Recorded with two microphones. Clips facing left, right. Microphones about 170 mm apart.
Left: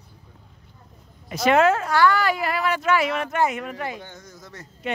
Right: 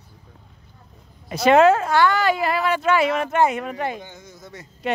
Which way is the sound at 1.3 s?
30° right (ahead or behind).